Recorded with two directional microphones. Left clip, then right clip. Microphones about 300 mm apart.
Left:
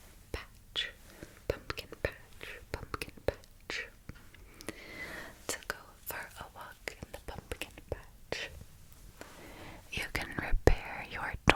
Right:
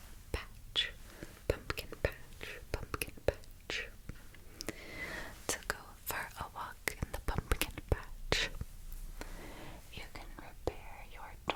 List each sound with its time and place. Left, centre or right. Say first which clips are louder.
0.3 s whispering: even; centre; by 8.5 s right
9.1 s a sound: even; centre
10.1 s whispering: left 14 dB; left